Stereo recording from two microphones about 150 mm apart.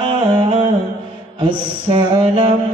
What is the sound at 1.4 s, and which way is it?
Mantra, 30° right (ahead or behind).